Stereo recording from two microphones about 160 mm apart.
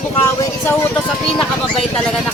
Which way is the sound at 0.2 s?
15° left (ahead or behind).